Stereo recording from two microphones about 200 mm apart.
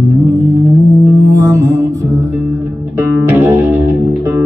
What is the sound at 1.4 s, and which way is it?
Music, 15° right (ahead or behind).